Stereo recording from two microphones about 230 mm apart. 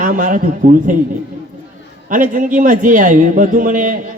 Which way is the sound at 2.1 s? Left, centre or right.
Right.